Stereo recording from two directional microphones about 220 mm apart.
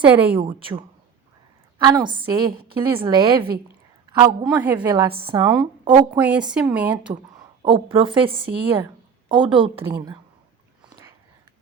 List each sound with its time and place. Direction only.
0.0 s a woman's voice: 5° right (ahead or behind)
0.3 s a woman's voice: 25° right (ahead or behind)
2.5 s a woman's voice: 45° right (ahead or behind)
2.9 s a woman's voice: 20° right (ahead or behind)
4.4 s a woman's voice: 5° right (ahead or behind)
4.9 s a woman's voice: 20° right (ahead or behind)
6.1 s a woman's voice: 5° right (ahead or behind)
7.6 s a woman's voice: 20° right (ahead or behind)
9.3 s a woman's voice: 5° right (ahead or behind)
9.6 s a woman's voice: 25° right (ahead or behind)